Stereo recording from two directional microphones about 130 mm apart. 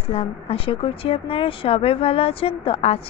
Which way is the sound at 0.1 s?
50° left (ahead or behind).